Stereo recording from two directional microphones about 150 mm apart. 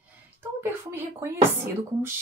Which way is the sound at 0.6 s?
15° right (ahead or behind).